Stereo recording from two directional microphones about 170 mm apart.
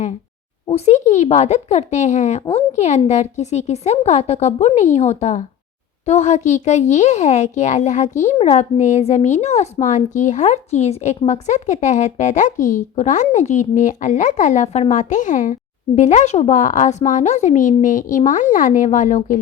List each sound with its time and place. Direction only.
0.7 s a child's voice: 40° left (ahead or behind)